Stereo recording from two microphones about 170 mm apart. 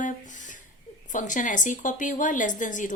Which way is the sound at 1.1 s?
50° left (ahead or behind).